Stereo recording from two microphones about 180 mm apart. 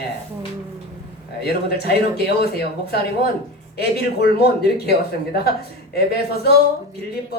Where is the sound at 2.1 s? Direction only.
65° left (ahead or behind).